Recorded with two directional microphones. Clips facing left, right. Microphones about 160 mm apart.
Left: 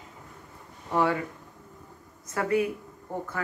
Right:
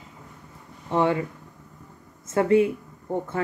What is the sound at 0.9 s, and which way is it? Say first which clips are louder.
Speech: right 3 dB; 25° right (ahead or behind).